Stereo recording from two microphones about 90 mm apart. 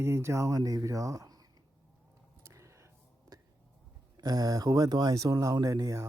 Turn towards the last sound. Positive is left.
turn(degrees=-40)  # may be behind; listen again after turning